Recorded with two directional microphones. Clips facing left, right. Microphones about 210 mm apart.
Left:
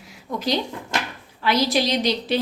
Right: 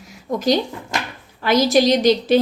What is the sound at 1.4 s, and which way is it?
Speech, 45° right (ahead or behind).